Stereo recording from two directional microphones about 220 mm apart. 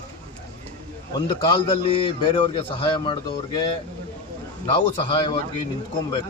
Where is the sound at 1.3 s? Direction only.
25° left (ahead or behind).